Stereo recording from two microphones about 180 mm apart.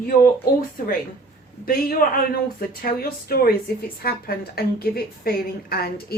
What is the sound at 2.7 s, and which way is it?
A woman's voice, 55° left (ahead or behind).